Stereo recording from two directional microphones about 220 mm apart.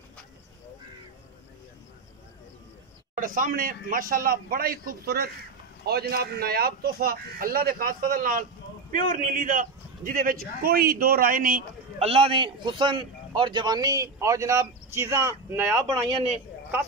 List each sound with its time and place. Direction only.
3.2 s a man's voice: 40° right (ahead or behind)
12.1 s a man's voice: 25° right (ahead or behind)